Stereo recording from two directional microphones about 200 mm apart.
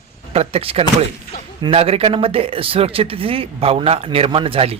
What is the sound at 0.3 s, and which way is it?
Speech, 30° right (ahead or behind).